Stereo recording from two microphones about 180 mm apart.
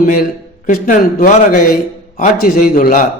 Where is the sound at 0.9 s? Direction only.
50° left (ahead or behind).